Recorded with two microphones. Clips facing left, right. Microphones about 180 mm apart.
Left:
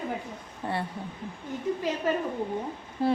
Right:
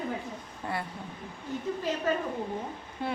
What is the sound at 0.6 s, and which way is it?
Speech, 30° left (ahead or behind).